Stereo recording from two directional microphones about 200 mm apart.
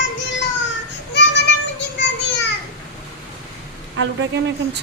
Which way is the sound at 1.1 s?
60° left (ahead or behind).